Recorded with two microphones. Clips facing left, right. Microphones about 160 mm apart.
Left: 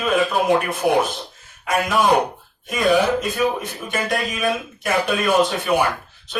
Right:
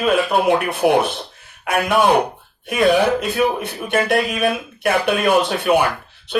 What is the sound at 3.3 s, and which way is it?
Speech, 65° right (ahead or behind).